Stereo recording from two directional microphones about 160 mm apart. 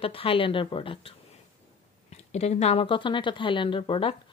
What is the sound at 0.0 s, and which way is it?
A woman's voice, 35° left (ahead or behind).